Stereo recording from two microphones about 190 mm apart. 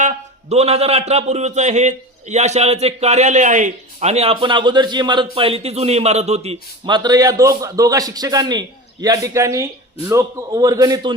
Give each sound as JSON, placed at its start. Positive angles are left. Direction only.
{"t": 0.0, "sound": "a man's voice", "side_deg": -35}